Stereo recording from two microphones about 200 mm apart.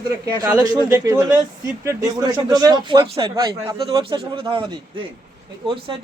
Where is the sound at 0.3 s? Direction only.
20° right (ahead or behind).